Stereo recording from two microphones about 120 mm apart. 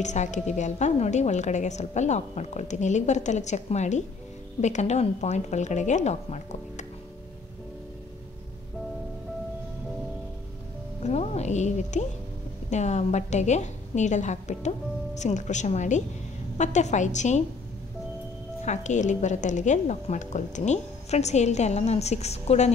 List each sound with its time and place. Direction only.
0.0 s a woman's voice: 80° left
11.1 s a sound: 70° left (ahead or behind)
12.6 s a woman's voice: 75° left (ahead or behind)
18.7 s a woman's voice: 80° left; by 22.7 s 65° left (ahead or behind)